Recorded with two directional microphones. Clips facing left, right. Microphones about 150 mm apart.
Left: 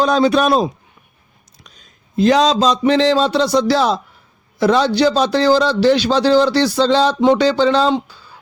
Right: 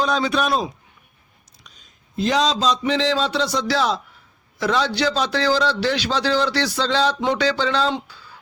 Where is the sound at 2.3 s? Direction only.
50° left (ahead or behind).